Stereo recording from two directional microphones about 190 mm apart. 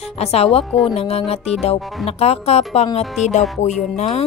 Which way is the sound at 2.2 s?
30° left (ahead or behind).